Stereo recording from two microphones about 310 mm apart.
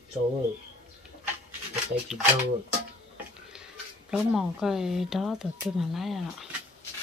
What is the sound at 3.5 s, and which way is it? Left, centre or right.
Speech, centre.